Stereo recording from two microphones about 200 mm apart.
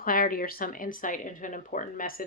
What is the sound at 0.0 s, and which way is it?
Speech, 45° left (ahead or behind).